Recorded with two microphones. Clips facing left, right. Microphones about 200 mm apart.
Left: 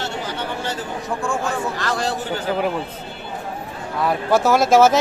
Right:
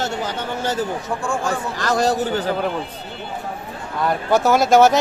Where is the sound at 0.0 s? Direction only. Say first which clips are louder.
Right 2 dB; 40° right (ahead or behind).